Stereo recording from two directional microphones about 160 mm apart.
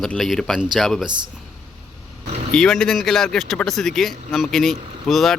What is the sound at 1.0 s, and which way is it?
Speech, 30° right (ahead or behind).